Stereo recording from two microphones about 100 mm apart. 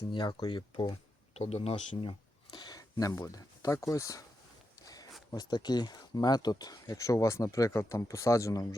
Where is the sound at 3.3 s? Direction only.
35° left (ahead or behind).